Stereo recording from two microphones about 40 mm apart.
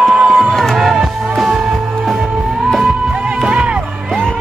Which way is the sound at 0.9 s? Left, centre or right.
Centre.